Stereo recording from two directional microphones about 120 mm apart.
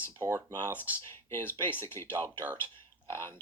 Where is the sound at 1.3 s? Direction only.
20° left (ahead or behind).